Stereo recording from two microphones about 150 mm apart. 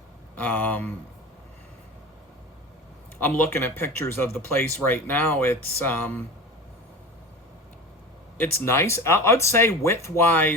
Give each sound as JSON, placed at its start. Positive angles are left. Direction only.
{"t": 0.3, "sound": "speech", "side_deg": 10}
{"t": 3.2, "sound": "speech", "side_deg": 10}
{"t": 8.4, "sound": "speech", "side_deg": 15}